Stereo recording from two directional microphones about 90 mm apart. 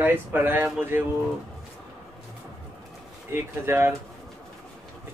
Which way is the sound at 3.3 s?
25° right (ahead or behind).